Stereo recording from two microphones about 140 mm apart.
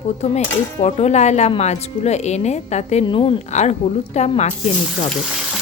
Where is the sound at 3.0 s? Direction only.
40° left (ahead or behind).